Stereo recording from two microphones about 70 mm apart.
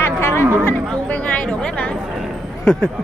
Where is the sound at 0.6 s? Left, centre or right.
Left.